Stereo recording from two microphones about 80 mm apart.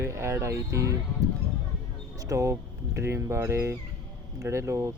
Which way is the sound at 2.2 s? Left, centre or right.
Right.